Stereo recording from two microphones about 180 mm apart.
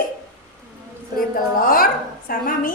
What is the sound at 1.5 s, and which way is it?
Speech, 50° left (ahead or behind).